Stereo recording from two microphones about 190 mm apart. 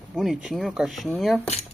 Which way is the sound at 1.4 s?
35° left (ahead or behind).